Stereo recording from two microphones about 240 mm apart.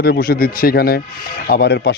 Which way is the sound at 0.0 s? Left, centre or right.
Left.